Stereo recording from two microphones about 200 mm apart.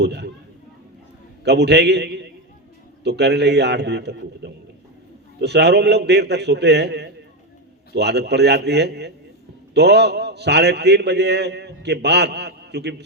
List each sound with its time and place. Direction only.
0.0 s a man's voice: 60° right (ahead or behind)
1.5 s a man's voice: 55° right (ahead or behind)